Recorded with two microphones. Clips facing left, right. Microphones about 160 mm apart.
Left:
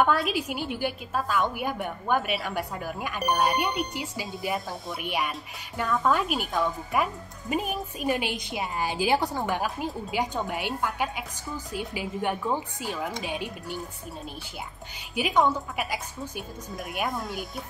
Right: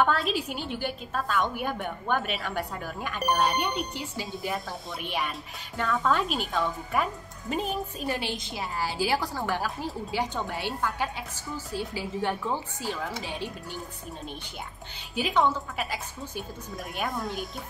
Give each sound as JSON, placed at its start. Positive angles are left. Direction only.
{"t": 0.0, "sound": "speech", "side_deg": 10}
{"t": 15.1, "sound": "speech", "side_deg": 10}
{"t": 17.0, "sound": "speech", "side_deg": 0}